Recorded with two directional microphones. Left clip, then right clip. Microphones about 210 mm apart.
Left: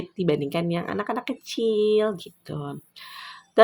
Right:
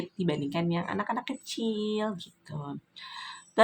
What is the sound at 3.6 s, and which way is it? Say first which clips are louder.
Jingle bell: left 6 dB; 25° left (ahead or behind).